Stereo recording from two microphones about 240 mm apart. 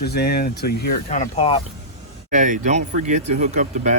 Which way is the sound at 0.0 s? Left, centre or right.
Left.